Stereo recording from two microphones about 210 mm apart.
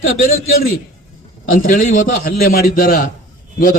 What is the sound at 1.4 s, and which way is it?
A man's voice, 40° left (ahead or behind).